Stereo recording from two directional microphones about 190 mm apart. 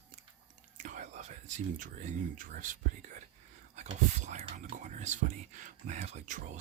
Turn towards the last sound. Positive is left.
turn(degrees=-40)  # may be behind; listen again after turning